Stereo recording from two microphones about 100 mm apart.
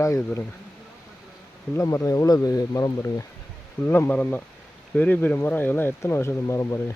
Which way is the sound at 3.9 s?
20° left (ahead or behind).